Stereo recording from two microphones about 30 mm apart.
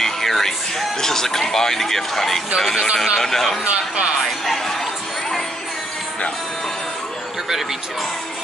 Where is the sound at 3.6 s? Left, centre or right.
Right.